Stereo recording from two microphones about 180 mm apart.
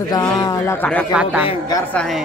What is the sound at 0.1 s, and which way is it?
Speech, 20° left (ahead or behind).